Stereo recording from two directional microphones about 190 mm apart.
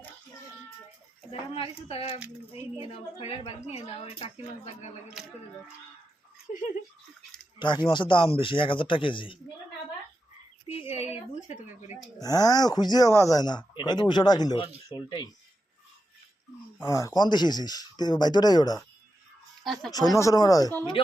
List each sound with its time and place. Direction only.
1.3 s a woman's voice: 30° left (ahead or behind)
7.6 s speech: 25° left (ahead or behind)
11.1 s a woman's voice: 40° left (ahead or behind)
12.2 s speech: 20° left (ahead or behind)
16.8 s speech: 15° left (ahead or behind)
19.6 s speech: centre (ahead or behind)
19.9 s speech: 20° left (ahead or behind)